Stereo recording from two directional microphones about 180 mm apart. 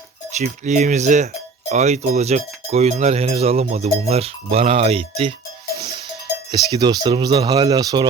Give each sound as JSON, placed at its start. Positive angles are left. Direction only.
{"t": 0.3, "sound": "speech", "side_deg": -40}
{"t": 6.5, "sound": "speech", "side_deg": -25}